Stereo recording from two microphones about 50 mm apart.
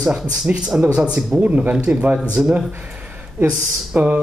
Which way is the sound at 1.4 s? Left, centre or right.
Right.